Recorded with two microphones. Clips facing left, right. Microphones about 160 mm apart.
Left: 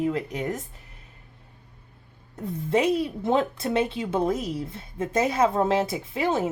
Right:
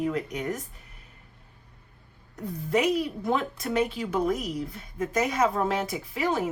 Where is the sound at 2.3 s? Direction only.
25° left (ahead or behind).